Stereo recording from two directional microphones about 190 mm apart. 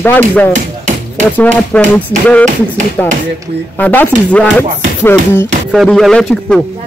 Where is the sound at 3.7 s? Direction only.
10° left (ahead or behind).